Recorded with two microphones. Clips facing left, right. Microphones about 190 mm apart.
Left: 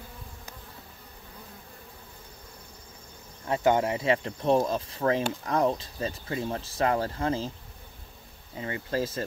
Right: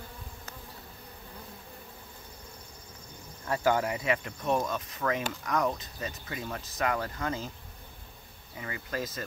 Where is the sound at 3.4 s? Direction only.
20° left (ahead or behind).